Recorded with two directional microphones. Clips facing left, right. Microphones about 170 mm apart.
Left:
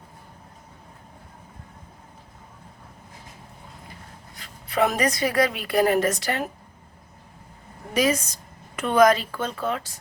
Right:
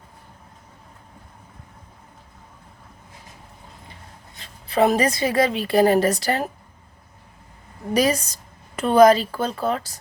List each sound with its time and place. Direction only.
4.4 s a woman's voice: 30° right (ahead or behind)
7.9 s a woman's voice: 35° right (ahead or behind)